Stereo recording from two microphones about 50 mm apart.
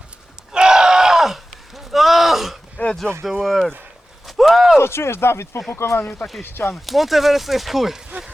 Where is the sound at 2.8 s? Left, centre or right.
Left.